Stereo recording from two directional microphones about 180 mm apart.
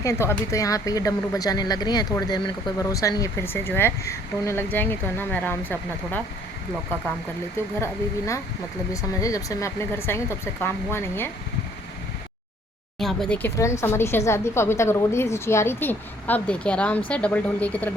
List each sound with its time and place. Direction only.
0.0 s speech: 15° left (ahead or behind)
8.9 s speech: 20° left (ahead or behind)
13.0 s speech: 5° left (ahead or behind)